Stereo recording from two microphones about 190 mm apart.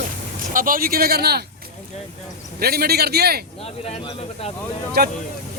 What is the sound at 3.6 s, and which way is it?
Speech, 30° left (ahead or behind).